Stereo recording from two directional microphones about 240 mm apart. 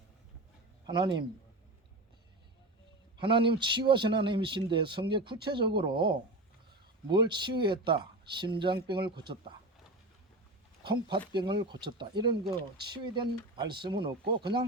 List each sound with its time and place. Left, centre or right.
0.9 s speech: centre
3.2 s a man's voice: right
11.3 s speech: centre